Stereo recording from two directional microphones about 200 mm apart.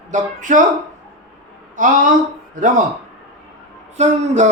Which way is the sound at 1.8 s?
40° right (ahead or behind).